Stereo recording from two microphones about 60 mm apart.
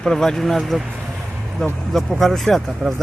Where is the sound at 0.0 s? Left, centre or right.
Centre.